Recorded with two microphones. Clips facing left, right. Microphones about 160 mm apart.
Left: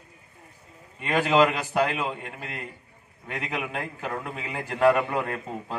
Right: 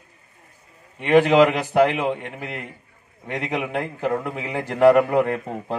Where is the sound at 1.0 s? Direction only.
70° right (ahead or behind).